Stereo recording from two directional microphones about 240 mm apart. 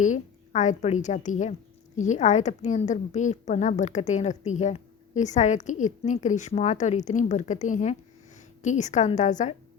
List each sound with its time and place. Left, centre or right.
0.0 s a woman's voice: left